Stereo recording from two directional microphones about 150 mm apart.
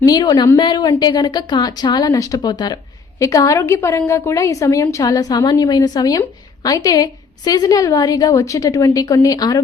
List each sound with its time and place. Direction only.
0.0 s a woman's voice: 25° left (ahead or behind)